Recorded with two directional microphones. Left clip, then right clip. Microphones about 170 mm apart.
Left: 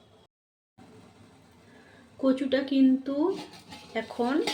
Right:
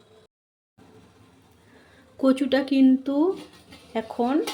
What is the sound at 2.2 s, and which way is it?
Speech, 30° right (ahead or behind).